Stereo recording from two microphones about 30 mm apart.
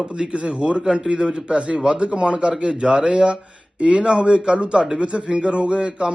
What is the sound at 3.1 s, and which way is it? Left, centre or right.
A man's voice, right.